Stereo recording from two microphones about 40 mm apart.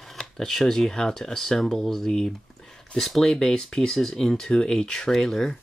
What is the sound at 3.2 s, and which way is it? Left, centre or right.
Speech, centre.